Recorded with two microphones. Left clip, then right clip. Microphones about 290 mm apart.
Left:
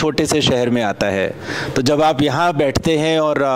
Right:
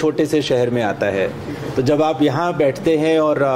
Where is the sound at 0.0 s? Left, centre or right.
Left.